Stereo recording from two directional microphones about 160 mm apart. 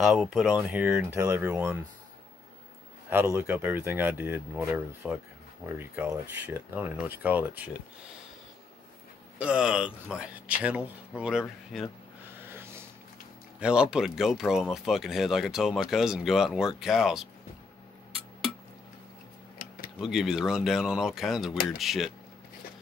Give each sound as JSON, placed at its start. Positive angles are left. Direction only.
{"t": 0.0, "sound": "speech", "side_deg": 0}
{"t": 0.9, "sound": "speech", "side_deg": -15}
{"t": 3.1, "sound": "speech", "side_deg": -15}
{"t": 9.4, "sound": "speech", "side_deg": -5}
{"t": 12.4, "sound": "a sound", "side_deg": -15}
{"t": 13.6, "sound": "speech", "side_deg": -5}
{"t": 19.6, "sound": "tick-tock", "side_deg": 60}
{"t": 20.0, "sound": "speech", "side_deg": -5}